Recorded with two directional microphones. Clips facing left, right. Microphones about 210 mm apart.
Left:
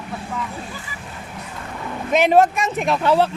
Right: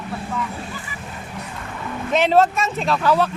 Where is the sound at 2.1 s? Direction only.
15° left (ahead or behind).